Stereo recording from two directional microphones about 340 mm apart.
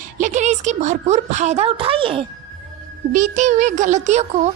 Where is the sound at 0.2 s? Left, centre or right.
Right.